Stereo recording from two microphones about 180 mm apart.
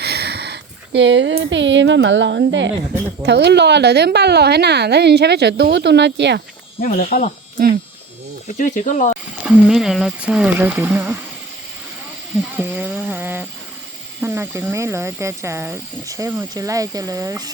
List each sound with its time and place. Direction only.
0.0 s speech: 65° right (ahead or behind); by 2.7 s 85° right
3.2 s a woman's voice: 70° right (ahead or behind)
6.7 s speech: 50° left (ahead or behind)
8.4 s speech: 45° left (ahead or behind)
9.4 s speech: 5° right (ahead or behind)
12.5 s a sound: 10° right (ahead or behind)
14.2 s speech: 10° right (ahead or behind)